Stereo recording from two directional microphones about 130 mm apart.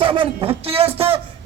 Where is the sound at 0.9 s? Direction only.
50° right (ahead or behind).